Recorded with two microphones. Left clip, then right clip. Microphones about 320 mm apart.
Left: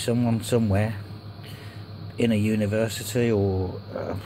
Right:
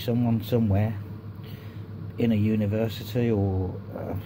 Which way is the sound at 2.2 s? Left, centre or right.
Centre.